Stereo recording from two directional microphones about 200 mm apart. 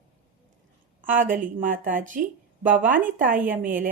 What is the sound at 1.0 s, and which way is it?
A woman's voice, 40° right (ahead or behind).